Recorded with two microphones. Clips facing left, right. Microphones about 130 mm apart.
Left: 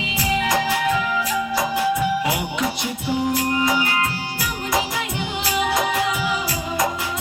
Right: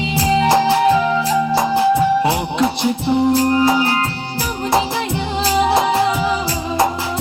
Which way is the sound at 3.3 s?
30° right (ahead or behind).